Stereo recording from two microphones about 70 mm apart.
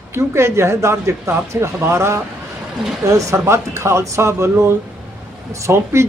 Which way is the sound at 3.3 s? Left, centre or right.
Right.